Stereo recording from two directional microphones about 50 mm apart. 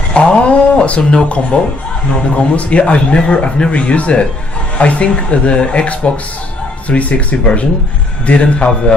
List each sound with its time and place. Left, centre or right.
0.1 s speech: left
2.6 s speech: left